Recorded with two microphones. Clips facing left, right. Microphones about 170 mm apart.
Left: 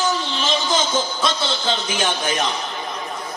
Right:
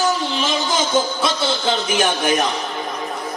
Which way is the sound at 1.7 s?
20° right (ahead or behind).